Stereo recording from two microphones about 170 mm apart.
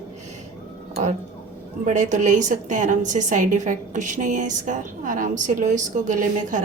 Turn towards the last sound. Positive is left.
turn(degrees=-50)  # may be behind; listen again after turning